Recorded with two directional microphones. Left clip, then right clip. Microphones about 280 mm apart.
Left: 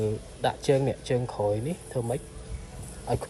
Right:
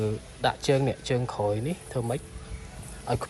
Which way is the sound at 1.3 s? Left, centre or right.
Right.